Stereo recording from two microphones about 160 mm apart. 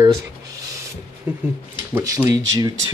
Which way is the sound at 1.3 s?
10° right (ahead or behind).